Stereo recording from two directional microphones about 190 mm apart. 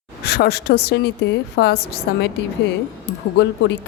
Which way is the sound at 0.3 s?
60° left (ahead or behind).